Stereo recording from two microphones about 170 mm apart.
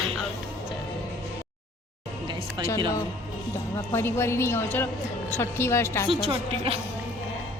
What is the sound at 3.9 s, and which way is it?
A woman's voice, 15° left (ahead or behind).